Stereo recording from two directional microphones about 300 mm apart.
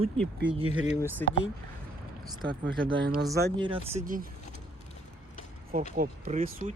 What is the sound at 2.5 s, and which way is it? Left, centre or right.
Speech, right.